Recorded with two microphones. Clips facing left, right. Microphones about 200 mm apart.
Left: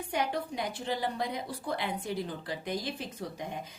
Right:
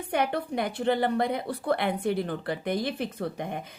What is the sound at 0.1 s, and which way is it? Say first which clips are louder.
A woman's voice: right 5 dB; 60° right (ahead or behind).